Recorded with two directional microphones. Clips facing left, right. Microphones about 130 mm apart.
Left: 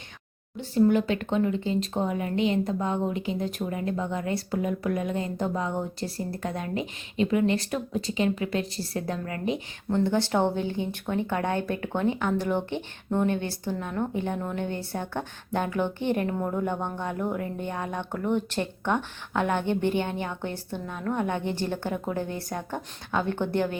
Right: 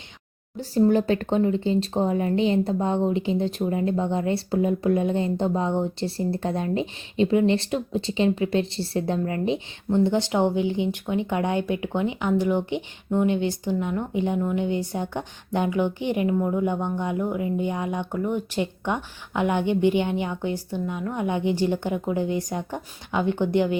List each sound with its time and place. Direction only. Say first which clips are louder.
0.5 s speech: right 2 dB; 40° right (ahead or behind); by 23.7 s 15° right (ahead or behind)